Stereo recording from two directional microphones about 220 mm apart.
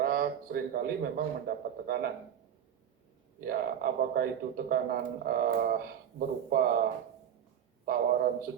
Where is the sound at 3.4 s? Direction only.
40° right (ahead or behind).